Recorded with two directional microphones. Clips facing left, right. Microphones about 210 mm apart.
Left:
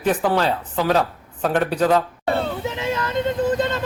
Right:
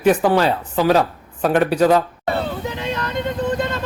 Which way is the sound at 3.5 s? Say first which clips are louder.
Left 1 dB; 20° left (ahead or behind).